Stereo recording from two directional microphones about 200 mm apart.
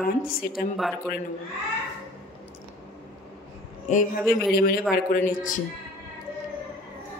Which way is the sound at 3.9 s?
40° left (ahead or behind).